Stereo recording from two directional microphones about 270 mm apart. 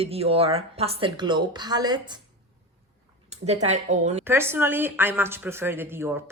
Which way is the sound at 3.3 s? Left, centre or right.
Right.